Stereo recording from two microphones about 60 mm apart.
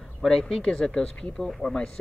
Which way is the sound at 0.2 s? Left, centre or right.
Centre.